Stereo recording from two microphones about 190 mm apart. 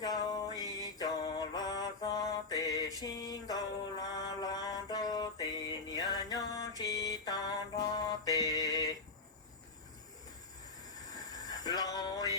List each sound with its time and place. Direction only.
0.0 s music: 20° left (ahead or behind)
0.6 s mantra: 20° left (ahead or behind)
7.9 s music: 20° left (ahead or behind)
11.4 s a sound: 20° left (ahead or behind)